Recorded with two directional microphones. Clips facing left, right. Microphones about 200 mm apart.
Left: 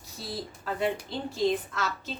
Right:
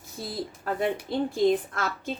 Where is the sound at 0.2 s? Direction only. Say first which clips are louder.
Right 3 dB; 55° right (ahead or behind).